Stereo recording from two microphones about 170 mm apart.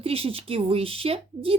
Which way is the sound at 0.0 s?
35° right (ahead or behind).